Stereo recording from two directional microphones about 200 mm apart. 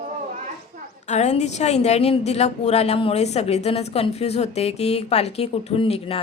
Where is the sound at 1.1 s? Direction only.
35° left (ahead or behind).